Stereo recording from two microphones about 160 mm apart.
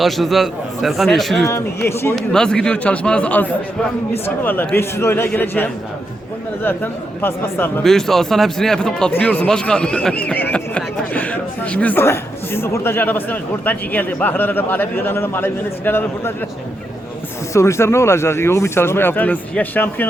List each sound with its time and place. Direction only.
0.0 s a man's voice: centre (ahead or behind)
1.5 s speech: 15° left (ahead or behind)
2.1 s speech: 5° left (ahead or behind)
7.9 s speech: centre (ahead or behind)
17.5 s speech: 15° left (ahead or behind)